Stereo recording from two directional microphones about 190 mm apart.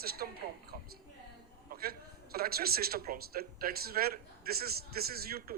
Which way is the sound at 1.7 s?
50° right (ahead or behind).